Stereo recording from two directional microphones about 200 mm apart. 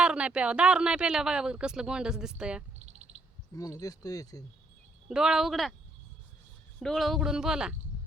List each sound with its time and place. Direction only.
0.0 s speech: 5° right (ahead or behind)
2.7 s a sound: 35° right (ahead or behind)
3.5 s speech: 15° left (ahead or behind)
5.0 s speech: centre (ahead or behind)
6.7 s speech: centre (ahead or behind)